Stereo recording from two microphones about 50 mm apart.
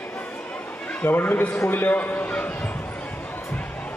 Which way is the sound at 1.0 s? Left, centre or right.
Left.